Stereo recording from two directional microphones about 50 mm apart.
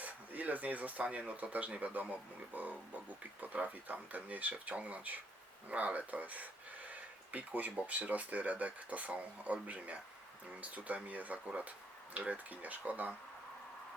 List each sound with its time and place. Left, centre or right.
0.0 s speech: right